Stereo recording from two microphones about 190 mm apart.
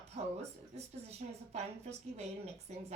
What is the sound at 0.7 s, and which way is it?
A woman's voice, 35° right (ahead or behind).